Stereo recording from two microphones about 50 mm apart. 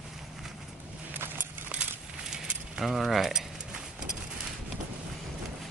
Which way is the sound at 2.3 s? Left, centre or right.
Centre.